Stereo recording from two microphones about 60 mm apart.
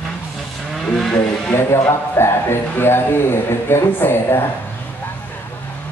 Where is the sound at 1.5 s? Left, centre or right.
Left.